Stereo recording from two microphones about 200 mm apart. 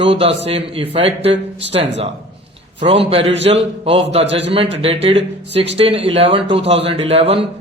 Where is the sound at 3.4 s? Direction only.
30° right (ahead or behind).